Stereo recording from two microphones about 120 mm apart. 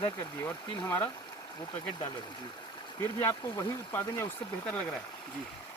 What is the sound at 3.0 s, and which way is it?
Speech, 25° left (ahead or behind).